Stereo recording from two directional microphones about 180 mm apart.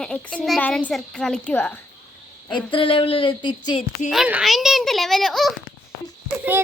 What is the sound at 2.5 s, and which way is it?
Speech, 30° left (ahead or behind).